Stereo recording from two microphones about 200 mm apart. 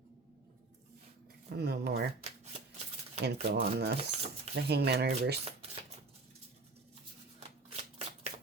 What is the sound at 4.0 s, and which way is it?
Speech, 30° right (ahead or behind).